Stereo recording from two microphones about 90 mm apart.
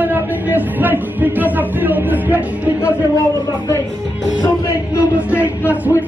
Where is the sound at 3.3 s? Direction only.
35° left (ahead or behind).